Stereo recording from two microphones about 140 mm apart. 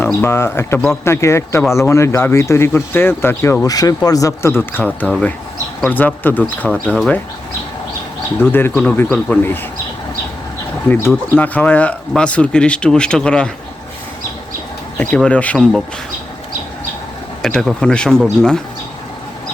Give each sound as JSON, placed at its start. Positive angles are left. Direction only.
{"t": 0.2, "sound": "speech", "side_deg": 15}
{"t": 6.7, "sound": "speech", "side_deg": 0}
{"t": 8.4, "sound": "speech", "side_deg": 15}
{"t": 10.8, "sound": "speech", "side_deg": 15}
{"t": 15.1, "sound": "speech", "side_deg": 10}
{"t": 17.4, "sound": "speech", "side_deg": 0}